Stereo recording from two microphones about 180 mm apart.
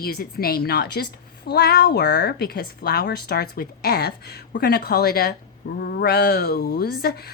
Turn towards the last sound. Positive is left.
turn(degrees=60)  # may be behind; listen again after turning